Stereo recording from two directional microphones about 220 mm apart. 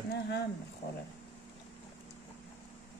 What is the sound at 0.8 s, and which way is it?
Speech, 50° left (ahead or behind).